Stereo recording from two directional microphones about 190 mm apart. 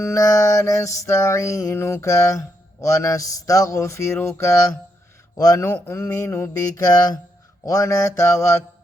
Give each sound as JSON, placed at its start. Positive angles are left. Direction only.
{"t": 0.0, "sound": "mantra", "side_deg": 15}